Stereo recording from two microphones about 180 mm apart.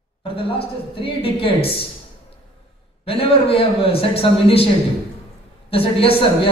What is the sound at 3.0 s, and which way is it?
A man's voice, 30° left (ahead or behind).